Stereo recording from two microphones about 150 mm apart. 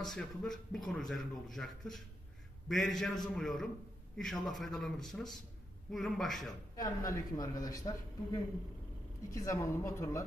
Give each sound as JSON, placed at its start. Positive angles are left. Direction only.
{"t": 0.0, "sound": "a man's voice", "side_deg": 5}
{"t": 6.8, "sound": "speech", "side_deg": 20}